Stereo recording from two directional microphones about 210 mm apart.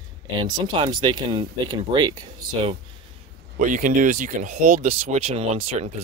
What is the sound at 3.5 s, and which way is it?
Speech, 40° right (ahead or behind).